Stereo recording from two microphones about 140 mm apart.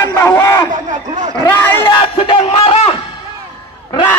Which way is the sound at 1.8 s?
35° left (ahead or behind).